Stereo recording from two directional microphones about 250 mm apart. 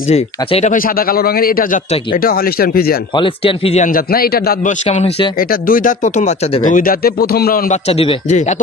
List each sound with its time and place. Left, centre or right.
0.1 s speech: left
3.2 s speech: left
4.8 s speech: left